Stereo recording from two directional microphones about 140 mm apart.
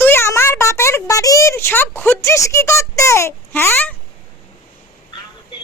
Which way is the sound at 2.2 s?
20° left (ahead or behind).